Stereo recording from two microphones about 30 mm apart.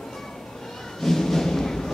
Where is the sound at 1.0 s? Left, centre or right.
Centre.